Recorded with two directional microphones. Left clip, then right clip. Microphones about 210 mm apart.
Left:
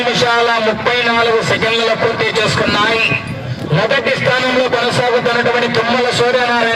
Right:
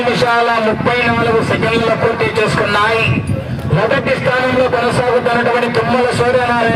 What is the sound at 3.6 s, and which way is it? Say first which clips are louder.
A man's voice: even; 45° left (ahead or behind).